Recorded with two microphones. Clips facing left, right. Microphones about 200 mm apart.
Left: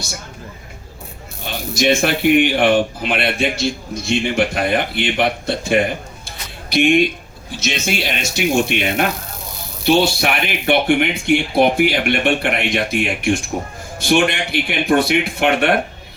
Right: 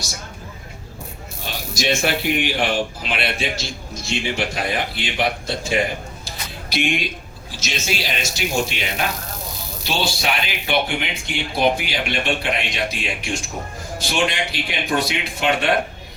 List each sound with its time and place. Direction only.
1.7 s speech: 60° left (ahead or behind)